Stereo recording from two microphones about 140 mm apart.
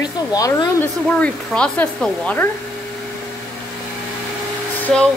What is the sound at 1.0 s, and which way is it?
Speech, 10° left (ahead or behind).